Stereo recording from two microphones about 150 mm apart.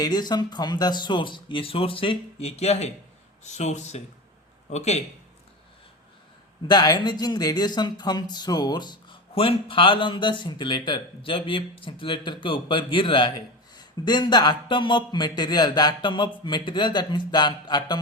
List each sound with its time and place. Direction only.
0.0 s speech: 30° left (ahead or behind); by 5.0 s 45° left (ahead or behind)
6.7 s speech: 25° left (ahead or behind)